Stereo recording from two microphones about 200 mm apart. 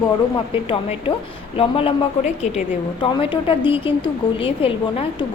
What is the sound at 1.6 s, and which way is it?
Speech, 25° left (ahead or behind).